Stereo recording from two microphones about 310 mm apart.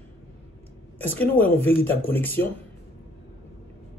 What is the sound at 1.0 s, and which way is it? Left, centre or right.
Speech, centre.